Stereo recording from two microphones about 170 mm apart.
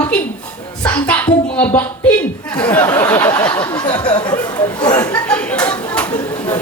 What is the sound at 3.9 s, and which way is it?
Speech, 25° left (ahead or behind).